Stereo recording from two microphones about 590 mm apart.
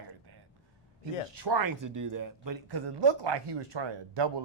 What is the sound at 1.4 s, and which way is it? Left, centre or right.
Speech, right.